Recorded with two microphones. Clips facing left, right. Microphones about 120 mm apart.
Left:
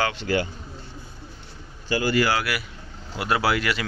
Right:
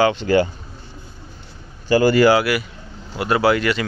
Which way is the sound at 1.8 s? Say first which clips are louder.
Right 8 dB; 45° right (ahead or behind).